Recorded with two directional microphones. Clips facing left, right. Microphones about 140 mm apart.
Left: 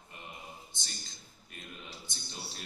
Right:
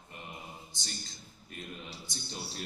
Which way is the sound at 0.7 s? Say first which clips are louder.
Right 4 dB; 35° right (ahead or behind).